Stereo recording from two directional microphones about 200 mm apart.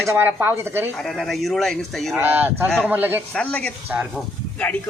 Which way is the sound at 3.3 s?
5° left (ahead or behind).